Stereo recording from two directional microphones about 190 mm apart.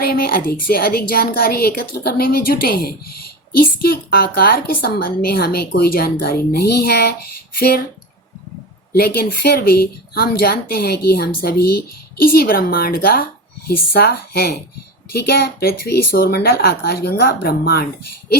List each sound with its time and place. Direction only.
0.0 s a woman's voice: 55° left (ahead or behind)
9.0 s a woman's voice: 55° left (ahead or behind)